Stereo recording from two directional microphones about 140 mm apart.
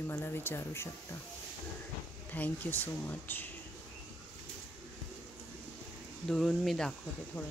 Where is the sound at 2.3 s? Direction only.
10° left (ahead or behind).